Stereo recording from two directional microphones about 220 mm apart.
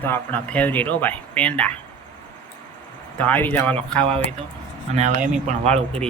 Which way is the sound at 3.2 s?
10° left (ahead or behind).